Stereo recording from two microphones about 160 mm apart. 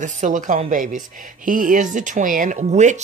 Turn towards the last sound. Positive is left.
turn(degrees=-50)  # may be behind; listen again after turning